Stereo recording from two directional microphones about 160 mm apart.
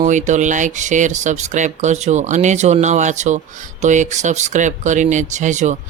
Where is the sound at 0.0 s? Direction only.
50° right (ahead or behind).